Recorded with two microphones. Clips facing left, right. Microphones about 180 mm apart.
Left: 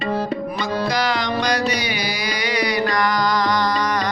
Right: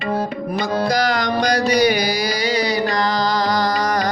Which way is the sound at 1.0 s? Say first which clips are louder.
Right 2 dB; 40° right (ahead or behind).